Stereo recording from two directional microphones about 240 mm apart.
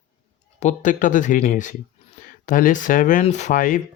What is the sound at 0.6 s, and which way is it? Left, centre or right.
Speech, left.